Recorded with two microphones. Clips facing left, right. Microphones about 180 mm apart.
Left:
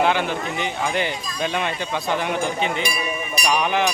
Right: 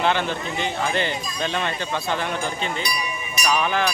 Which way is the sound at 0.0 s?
10° left (ahead or behind).